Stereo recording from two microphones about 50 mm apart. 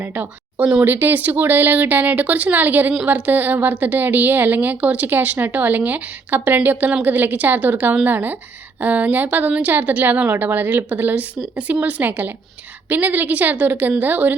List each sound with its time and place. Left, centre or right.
0.0 s a sound: right
0.8 s a woman's voice: right
9.5 s speech: right
9.7 s a woman's voice: right
10.8 s a woman's voice: right